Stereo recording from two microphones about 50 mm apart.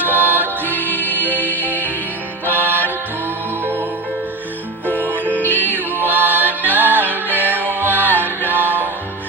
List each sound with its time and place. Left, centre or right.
0.0 s music: right
0.6 s music: left
1.1 s music: right
4.9 s music: right